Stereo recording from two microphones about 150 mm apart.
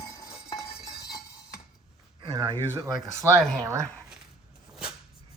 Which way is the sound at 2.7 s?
20° right (ahead or behind).